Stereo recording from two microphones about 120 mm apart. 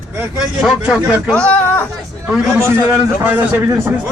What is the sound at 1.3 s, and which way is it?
Speech, 10° left (ahead or behind).